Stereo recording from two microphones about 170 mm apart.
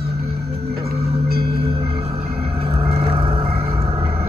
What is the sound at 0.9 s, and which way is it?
Music, 65° right (ahead or behind).